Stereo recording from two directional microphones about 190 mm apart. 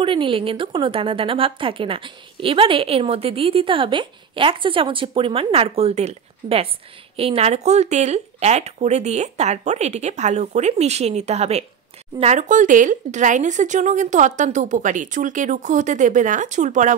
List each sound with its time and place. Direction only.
0.0 s a woman's voice: 25° right (ahead or behind)